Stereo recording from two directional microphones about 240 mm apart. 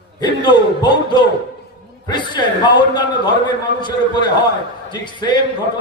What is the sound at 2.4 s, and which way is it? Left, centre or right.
A man's voice, centre.